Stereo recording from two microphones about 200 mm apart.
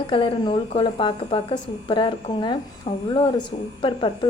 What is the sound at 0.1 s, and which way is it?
A woman's voice, 25° left (ahead or behind).